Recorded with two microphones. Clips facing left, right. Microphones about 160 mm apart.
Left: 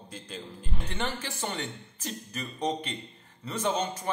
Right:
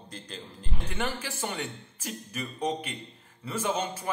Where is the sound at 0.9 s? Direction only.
5° right (ahead or behind).